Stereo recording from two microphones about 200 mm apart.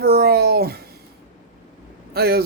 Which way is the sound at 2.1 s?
50° right (ahead or behind).